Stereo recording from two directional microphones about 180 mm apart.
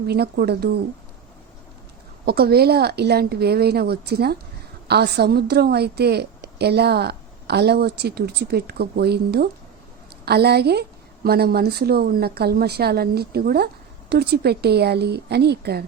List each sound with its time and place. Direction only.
0.1 s a woman's voice: 65° right (ahead or behind)
2.2 s a woman's voice: 60° right (ahead or behind)